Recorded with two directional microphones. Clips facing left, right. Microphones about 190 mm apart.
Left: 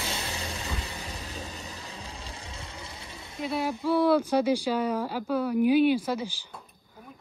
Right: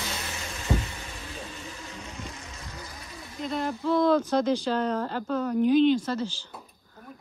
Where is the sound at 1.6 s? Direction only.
35° left (ahead or behind).